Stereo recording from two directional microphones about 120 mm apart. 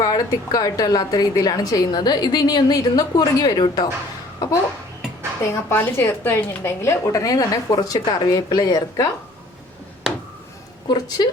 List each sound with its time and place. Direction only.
0.0 s a woman's voice: 35° left (ahead or behind)
5.4 s a woman's voice: 20° left (ahead or behind)
10.8 s a woman's voice: 35° left (ahead or behind)